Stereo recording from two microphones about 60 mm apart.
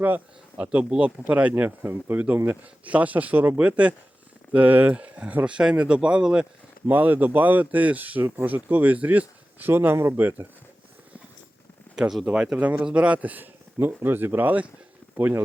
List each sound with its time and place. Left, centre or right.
0.5 s a man's voice: right
6.8 s a man's voice: right
10.2 s speech: right
11.9 s a sound: left
12.2 s a man's voice: centre